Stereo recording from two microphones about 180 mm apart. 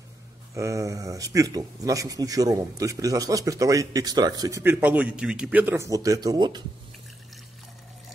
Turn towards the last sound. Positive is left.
turn(degrees=-25)  # may be behind; listen again after turning